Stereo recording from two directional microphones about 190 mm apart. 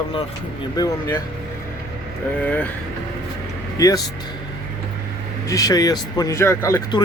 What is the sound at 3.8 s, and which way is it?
Speech, 20° left (ahead or behind).